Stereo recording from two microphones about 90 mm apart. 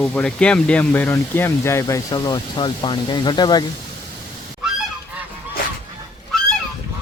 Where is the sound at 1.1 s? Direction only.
30° left (ahead or behind).